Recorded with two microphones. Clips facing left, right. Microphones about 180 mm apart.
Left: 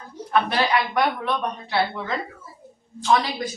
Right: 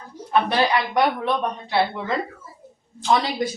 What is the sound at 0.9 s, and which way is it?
Speech, 25° right (ahead or behind).